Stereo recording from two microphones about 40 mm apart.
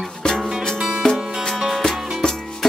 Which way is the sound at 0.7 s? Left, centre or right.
Centre.